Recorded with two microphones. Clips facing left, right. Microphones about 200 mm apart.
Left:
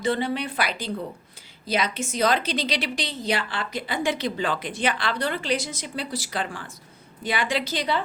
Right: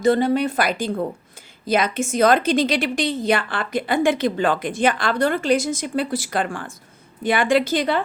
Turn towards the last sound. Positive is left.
turn(degrees=-50)  # may be behind; listen again after turning